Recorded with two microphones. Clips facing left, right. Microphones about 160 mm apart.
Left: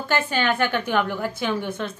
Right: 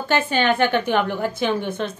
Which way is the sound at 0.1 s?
20° right (ahead or behind).